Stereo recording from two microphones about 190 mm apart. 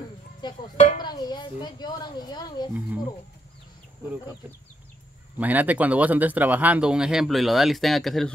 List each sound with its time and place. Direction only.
0.4 s speech: 25° left (ahead or behind)
0.7 s speech: 40° left (ahead or behind)
1.0 s speech: 25° left (ahead or behind)
5.4 s speech: 10° right (ahead or behind)